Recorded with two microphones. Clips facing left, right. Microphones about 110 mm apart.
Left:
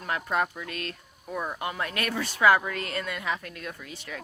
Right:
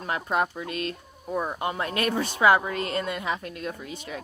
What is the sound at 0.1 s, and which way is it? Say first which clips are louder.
A woman's voice: right 2 dB; 25° right (ahead or behind).